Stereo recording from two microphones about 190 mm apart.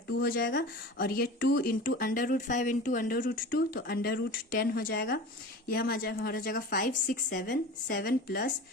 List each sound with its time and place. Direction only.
0.2 s speech: 55° left (ahead or behind)